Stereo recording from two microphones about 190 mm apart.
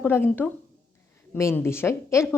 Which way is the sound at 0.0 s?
10° left (ahead or behind).